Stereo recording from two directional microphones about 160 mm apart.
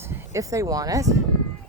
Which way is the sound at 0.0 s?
15° right (ahead or behind).